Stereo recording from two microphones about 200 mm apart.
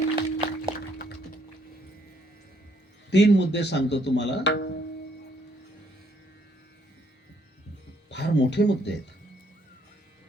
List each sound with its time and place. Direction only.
0.2 s a sound: 25° right (ahead or behind)
3.1 s speech: 60° left (ahead or behind)
8.1 s speech: 60° left (ahead or behind)